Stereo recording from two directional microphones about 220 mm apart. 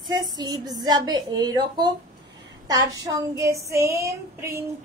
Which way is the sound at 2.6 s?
15° right (ahead or behind).